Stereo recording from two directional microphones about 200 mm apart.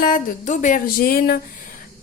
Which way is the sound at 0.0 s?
40° left (ahead or behind).